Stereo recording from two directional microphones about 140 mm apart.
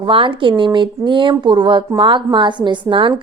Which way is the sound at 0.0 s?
40° right (ahead or behind).